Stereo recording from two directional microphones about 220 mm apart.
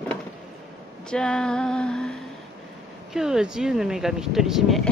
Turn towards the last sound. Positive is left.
turn(degrees=0)  # may be behind; listen again after turning